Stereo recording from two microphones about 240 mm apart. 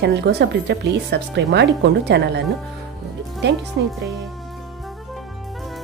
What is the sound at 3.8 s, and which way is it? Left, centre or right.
Speech, right.